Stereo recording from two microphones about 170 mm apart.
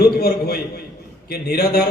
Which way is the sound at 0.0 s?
65° left (ahead or behind).